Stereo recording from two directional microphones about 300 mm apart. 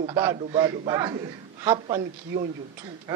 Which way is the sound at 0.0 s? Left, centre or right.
Centre.